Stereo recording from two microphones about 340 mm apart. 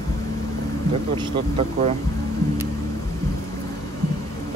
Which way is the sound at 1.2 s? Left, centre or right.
Centre.